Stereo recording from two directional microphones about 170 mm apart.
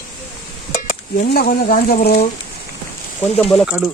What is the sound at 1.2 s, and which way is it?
Speech, 60° left (ahead or behind).